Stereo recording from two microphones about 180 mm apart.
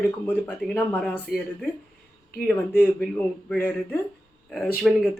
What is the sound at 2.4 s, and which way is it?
A man's voice, 10° left (ahead or behind).